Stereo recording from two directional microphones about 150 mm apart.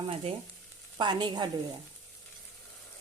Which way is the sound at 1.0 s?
30° right (ahead or behind).